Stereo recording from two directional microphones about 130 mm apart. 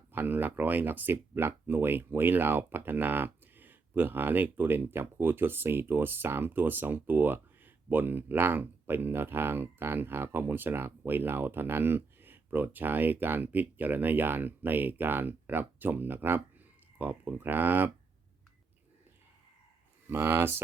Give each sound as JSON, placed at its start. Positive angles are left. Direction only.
{"t": 0.1, "sound": "speech", "side_deg": -15}
{"t": 20.1, "sound": "speech", "side_deg": -15}